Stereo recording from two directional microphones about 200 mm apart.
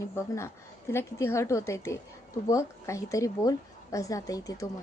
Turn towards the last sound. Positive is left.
turn(degrees=15)  # may be behind; listen again after turning